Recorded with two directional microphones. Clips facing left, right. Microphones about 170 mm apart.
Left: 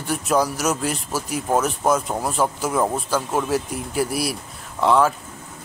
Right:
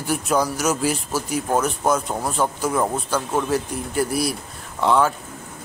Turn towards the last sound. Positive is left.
turn(degrees=0)  # may be behind; listen again after turning